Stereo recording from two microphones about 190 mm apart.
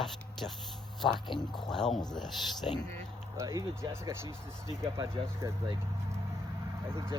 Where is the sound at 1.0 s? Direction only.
25° left (ahead or behind).